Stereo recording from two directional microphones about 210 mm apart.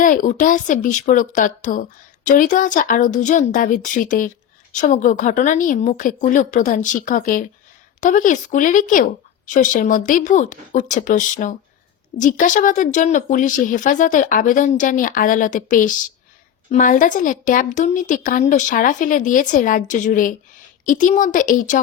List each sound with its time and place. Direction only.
0.0 s speech: 40° left (ahead or behind)